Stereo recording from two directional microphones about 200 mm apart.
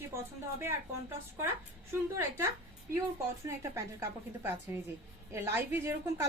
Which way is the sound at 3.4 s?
15° right (ahead or behind).